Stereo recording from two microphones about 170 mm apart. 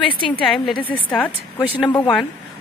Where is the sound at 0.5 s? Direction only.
Centre (ahead or behind).